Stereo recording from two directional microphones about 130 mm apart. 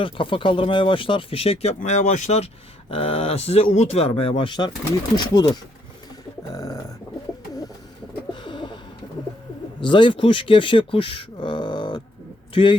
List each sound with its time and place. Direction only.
0.0 s speech: 40° left (ahead or behind); by 2.5 s 60° left (ahead or behind)
2.9 s speech: 50° left (ahead or behind); by 5.5 s 30° left (ahead or behind)
6.5 s a sound: 30° left (ahead or behind)
8.3 s bird: 35° left (ahead or behind)
9.8 s speech: 40° left (ahead or behind)